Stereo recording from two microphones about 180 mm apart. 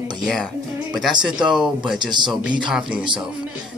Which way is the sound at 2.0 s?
25° right (ahead or behind).